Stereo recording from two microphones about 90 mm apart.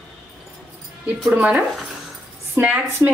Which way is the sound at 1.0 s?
15° right (ahead or behind).